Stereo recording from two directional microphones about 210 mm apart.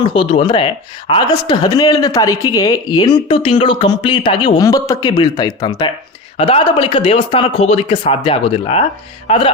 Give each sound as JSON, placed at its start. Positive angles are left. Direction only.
{"t": 0.0, "sound": "speech", "side_deg": 25}